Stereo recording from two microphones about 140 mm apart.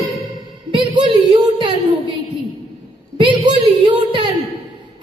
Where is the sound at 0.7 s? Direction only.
35° right (ahead or behind).